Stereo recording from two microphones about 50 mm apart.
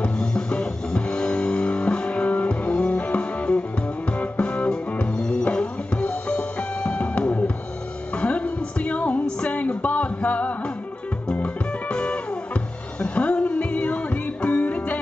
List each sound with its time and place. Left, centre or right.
0.0 s music: centre
7.2 s drum kit: left
8.1 s music: left